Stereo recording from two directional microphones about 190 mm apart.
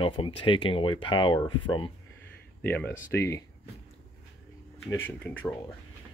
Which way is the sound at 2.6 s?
10° left (ahead or behind).